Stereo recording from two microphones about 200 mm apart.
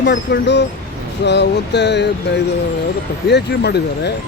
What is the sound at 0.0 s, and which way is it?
Speech, 60° left (ahead or behind).